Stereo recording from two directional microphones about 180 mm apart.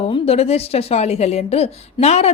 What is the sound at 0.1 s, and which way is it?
Speech, 35° left (ahead or behind).